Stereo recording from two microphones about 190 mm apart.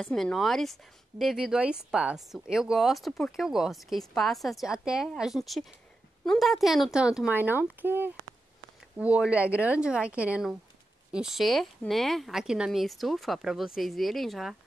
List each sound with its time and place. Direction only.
0.0 s speech: 5° left (ahead or behind)